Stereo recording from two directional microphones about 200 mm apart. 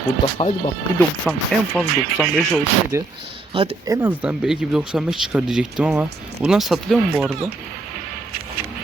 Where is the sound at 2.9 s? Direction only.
15° right (ahead or behind).